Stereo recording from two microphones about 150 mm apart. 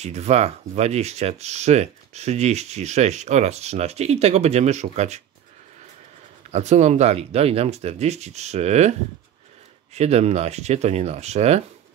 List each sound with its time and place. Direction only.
0.0 s speech: 45° right (ahead or behind)
6.5 s speech: 50° right (ahead or behind)
9.9 s speech: 45° right (ahead or behind)